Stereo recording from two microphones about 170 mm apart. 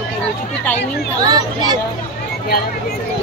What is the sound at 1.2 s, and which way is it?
Speech, 25° right (ahead or behind).